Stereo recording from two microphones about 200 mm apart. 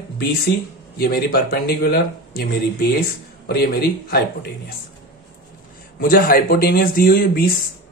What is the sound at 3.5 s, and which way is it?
Speech, 50° left (ahead or behind).